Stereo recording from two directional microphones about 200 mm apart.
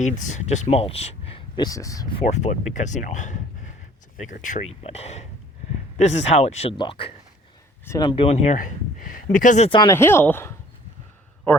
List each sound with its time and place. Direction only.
0.0 s speech: 35° left (ahead or behind)
8.5 s speech: 45° left (ahead or behind)
9.6 s speech: 25° left (ahead or behind)
9.9 s speech: 10° left (ahead or behind)